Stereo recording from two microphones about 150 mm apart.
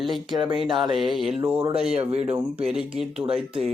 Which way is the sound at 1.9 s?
40° right (ahead or behind).